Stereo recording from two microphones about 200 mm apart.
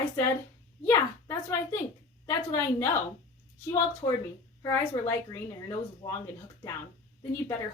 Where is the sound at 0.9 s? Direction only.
15° left (ahead or behind).